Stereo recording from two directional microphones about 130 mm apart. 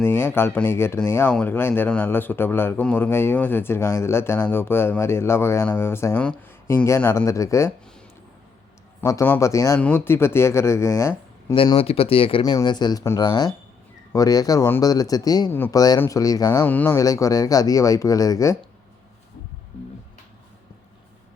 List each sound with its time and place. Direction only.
0.0 s a man's voice: 15° left (ahead or behind)
9.2 s speech: 20° left (ahead or behind)
11.5 s speech: 45° left (ahead or behind)
12.4 s speech: 35° left (ahead or behind)
16.6 s a man's voice: 15° left (ahead or behind)
17.0 s speech: 25° left (ahead or behind)